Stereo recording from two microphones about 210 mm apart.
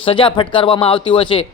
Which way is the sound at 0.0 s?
25° left (ahead or behind).